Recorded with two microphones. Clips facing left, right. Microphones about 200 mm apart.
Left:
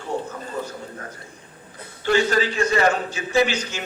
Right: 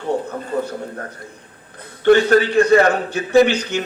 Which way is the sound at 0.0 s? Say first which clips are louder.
Right 6 dB; 60° right (ahead or behind).